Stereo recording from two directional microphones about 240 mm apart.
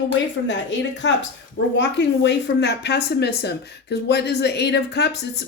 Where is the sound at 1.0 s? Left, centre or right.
Left.